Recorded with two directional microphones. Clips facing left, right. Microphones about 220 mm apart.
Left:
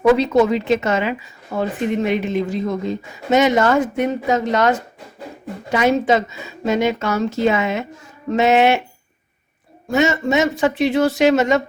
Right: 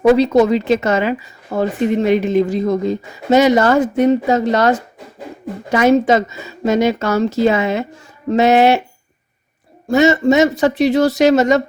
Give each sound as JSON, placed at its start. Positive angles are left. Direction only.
{"t": 0.0, "sound": "speech", "side_deg": -35}
{"t": 5.7, "sound": "speech", "side_deg": -45}
{"t": 9.9, "sound": "speech", "side_deg": -35}